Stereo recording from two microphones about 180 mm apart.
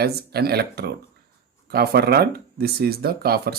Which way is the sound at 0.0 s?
60° right (ahead or behind).